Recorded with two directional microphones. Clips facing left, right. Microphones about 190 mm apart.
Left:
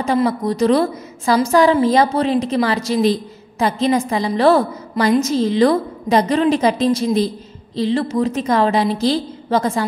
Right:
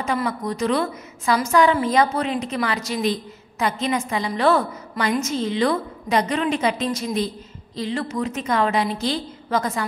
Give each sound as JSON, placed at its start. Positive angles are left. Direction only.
{"t": 0.0, "sound": "a woman's voice", "side_deg": 30}